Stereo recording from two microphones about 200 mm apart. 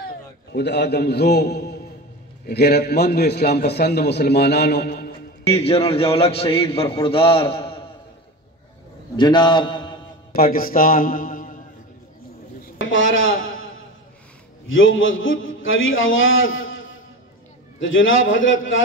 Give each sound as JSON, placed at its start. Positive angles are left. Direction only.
{"t": 0.5, "sound": "a man's voice", "side_deg": 60}
{"t": 5.5, "sound": "a man's voice", "side_deg": 30}
{"t": 9.1, "sound": "a man's voice", "side_deg": 20}
{"t": 10.3, "sound": "a man's voice", "side_deg": 45}
{"t": 12.9, "sound": "a sound", "side_deg": 75}
{"t": 14.7, "sound": "a man's voice", "side_deg": 80}